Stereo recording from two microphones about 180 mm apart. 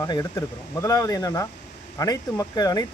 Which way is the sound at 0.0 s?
20° left (ahead or behind).